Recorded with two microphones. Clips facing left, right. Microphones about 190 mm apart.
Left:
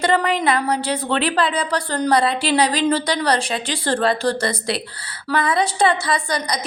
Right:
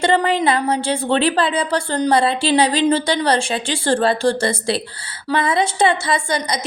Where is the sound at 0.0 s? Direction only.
25° right (ahead or behind).